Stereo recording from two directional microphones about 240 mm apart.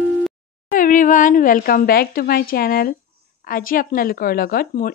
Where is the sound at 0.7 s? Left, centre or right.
Left.